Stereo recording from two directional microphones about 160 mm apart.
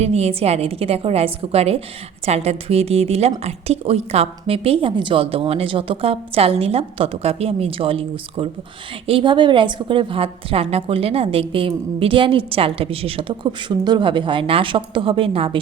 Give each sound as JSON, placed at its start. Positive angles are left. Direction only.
{"t": 0.0, "sound": "a woman's voice", "side_deg": -40}